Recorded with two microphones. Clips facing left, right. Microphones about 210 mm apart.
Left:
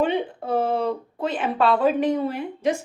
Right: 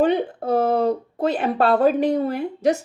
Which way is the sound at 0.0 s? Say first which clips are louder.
Right 4 dB; 40° right (ahead or behind).